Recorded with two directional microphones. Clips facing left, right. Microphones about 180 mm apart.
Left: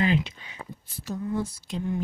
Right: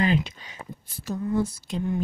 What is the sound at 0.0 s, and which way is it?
Speech, 40° right (ahead or behind).